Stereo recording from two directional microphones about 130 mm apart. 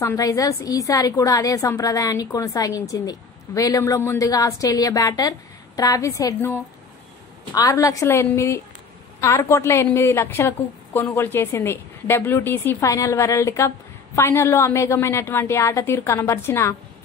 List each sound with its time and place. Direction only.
0.0 s a woman's voice: 25° left (ahead or behind)